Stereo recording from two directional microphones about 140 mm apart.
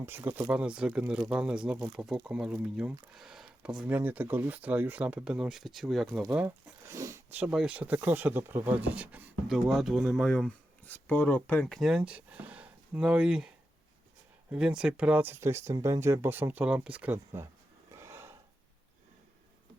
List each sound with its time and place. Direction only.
0.0 s speech: 15° right (ahead or behind)
7.4 s speech: 5° right (ahead or behind)
9.6 s speech: centre (ahead or behind)
14.5 s speech: 5° right (ahead or behind)
17.9 s a sound: 20° right (ahead or behind)